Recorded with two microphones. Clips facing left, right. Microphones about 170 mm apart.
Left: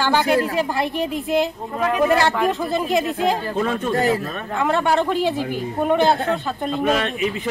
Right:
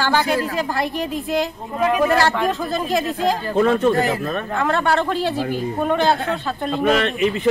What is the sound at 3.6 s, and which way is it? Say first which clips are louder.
Speech: right 6 dB; 65° right (ahead or behind).